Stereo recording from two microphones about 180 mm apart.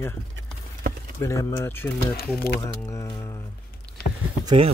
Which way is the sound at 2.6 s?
15° left (ahead or behind).